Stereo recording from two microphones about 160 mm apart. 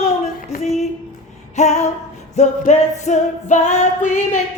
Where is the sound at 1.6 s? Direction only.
45° left (ahead or behind).